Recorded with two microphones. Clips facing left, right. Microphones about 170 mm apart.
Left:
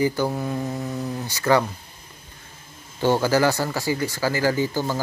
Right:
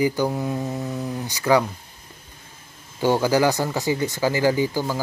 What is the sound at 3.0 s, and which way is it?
Speech, 15° right (ahead or behind).